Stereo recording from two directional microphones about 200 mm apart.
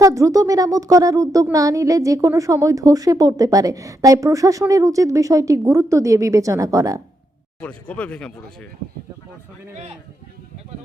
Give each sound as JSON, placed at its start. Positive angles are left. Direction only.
{"t": 0.0, "sound": "speech", "side_deg": -15}
{"t": 7.6, "sound": "speech", "side_deg": 5}